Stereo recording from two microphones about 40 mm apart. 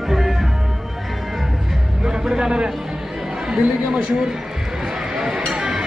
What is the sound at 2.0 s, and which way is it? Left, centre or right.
Music, centre.